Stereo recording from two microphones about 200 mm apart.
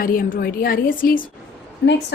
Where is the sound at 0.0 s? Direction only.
45° left (ahead or behind).